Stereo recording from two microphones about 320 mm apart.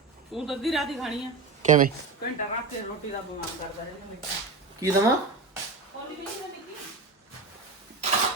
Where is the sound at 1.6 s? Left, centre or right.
Right.